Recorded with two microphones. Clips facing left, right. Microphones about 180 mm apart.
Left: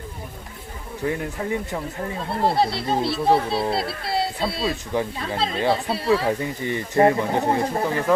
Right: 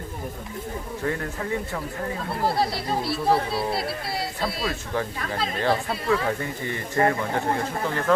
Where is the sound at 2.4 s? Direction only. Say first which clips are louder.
Left 4 dB; 25° left (ahead or behind).